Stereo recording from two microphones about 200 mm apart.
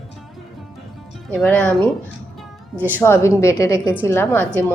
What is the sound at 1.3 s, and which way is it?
Speech, 5° left (ahead or behind).